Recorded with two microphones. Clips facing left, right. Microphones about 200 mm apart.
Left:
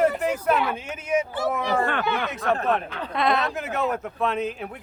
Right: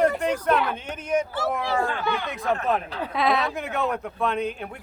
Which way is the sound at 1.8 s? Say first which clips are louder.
Left 2 dB; 65° left (ahead or behind).